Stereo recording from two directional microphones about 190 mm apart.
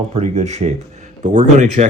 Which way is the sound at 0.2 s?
35° right (ahead or behind).